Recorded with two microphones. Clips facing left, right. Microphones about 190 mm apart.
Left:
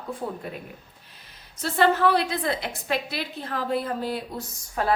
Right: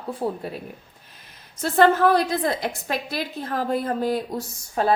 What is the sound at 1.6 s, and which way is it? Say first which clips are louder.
A woman's voice: right 4 dB; 50° right (ahead or behind).